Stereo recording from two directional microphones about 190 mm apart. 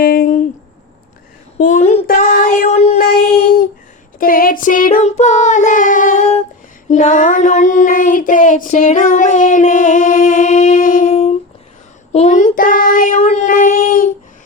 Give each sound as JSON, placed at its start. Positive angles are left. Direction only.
{"t": 0.0, "sound": "a sound", "side_deg": 50}
{"t": 1.5, "sound": "child singing", "side_deg": 45}
{"t": 4.2, "sound": "child singing", "side_deg": 50}